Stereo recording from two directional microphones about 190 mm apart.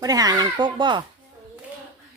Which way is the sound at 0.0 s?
20° right (ahead or behind).